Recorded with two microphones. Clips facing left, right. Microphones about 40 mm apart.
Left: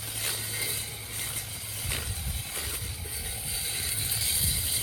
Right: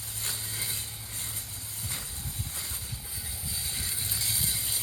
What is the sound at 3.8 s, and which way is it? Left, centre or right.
Vehicle, left.